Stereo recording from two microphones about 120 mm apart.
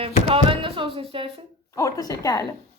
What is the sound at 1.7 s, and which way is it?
Speech, 30° left (ahead or behind).